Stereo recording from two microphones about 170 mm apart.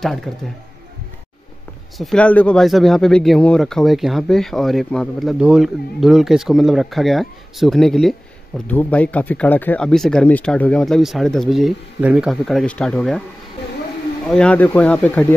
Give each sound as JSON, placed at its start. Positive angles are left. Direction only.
{"t": 0.0, "sound": "speech", "side_deg": 0}
{"t": 2.0, "sound": "speech", "side_deg": 5}
{"t": 14.3, "sound": "speech", "side_deg": 5}